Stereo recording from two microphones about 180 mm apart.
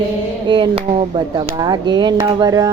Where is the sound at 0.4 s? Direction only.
25° right (ahead or behind).